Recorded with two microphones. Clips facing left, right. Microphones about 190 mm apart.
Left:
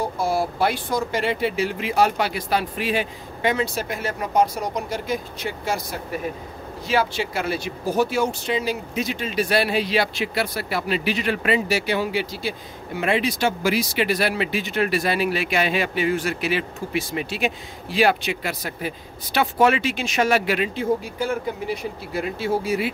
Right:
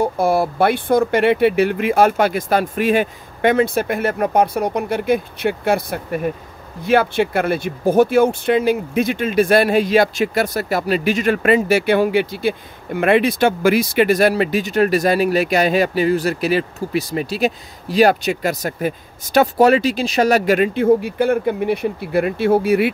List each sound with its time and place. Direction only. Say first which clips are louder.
0.0 s speech: right 6 dB; 60° right (ahead or behind)